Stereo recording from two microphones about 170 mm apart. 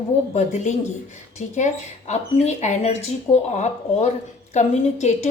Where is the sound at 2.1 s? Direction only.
40° left (ahead or behind).